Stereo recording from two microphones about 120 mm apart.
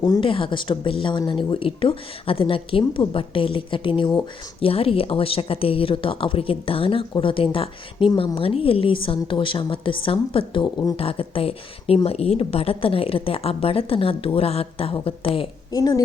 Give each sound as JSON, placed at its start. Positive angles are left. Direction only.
{"t": 0.0, "sound": "a child's voice", "side_deg": 35}
{"t": 0.3, "sound": "a woman's voice", "side_deg": 45}
{"t": 15.7, "sound": "a child's voice", "side_deg": 35}